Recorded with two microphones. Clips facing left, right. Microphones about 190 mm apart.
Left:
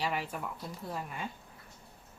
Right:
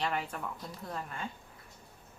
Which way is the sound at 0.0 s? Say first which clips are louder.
Even; 10° left (ahead or behind).